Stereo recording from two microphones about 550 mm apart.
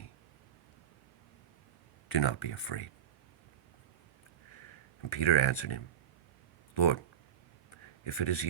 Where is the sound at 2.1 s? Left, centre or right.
Left.